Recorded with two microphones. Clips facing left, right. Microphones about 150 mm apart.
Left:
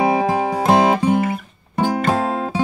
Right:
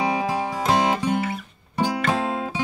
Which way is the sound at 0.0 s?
55° left (ahead or behind).